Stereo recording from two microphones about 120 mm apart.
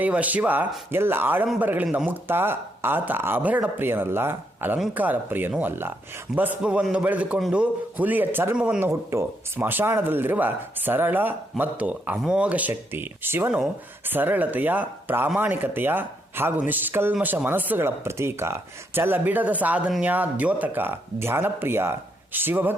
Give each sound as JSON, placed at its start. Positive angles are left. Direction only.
{"t": 0.0, "sound": "speech", "side_deg": -15}